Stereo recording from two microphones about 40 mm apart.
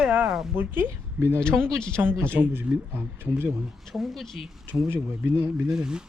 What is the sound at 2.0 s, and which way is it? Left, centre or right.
Speech, right.